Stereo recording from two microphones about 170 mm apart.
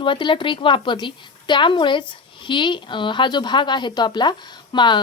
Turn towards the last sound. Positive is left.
turn(degrees=25)  # may be behind; listen again after turning